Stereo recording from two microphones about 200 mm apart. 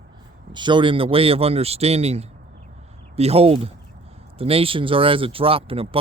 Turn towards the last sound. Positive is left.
turn(degrees=-30)  # may be behind; listen again after turning